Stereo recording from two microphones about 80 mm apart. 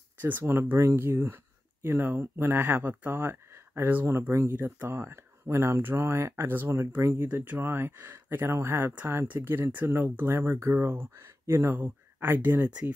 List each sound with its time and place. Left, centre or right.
0.2 s speech: right